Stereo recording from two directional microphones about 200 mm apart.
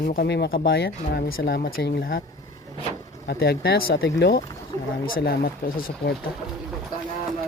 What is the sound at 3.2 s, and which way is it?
Speech, 55° left (ahead or behind).